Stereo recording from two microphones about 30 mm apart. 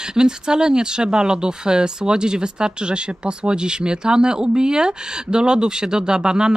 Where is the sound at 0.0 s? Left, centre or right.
Right.